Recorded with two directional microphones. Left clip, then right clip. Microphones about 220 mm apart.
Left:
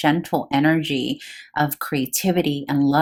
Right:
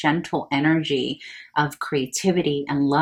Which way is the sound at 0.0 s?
50° left (ahead or behind).